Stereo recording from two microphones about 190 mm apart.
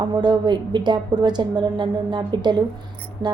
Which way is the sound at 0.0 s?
20° right (ahead or behind).